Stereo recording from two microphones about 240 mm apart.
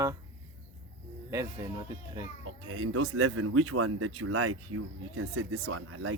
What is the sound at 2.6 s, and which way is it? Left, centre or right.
A child's voice, right.